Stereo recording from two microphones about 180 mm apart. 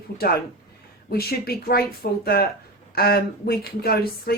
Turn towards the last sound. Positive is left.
turn(degrees=60)  # may be behind; listen again after turning